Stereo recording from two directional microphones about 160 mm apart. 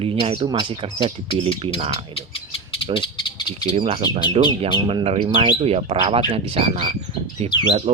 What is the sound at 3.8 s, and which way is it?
Speech, 35° right (ahead or behind).